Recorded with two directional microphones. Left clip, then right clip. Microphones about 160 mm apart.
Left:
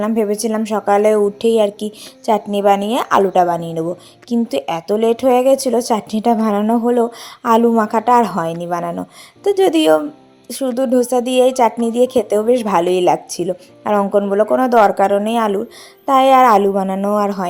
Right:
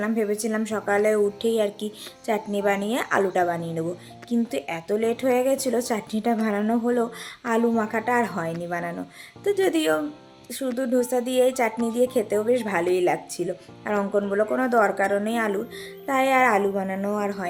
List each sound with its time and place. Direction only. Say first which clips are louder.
0.0 s a woman's voice: left 8 dB; 35° left (ahead or behind)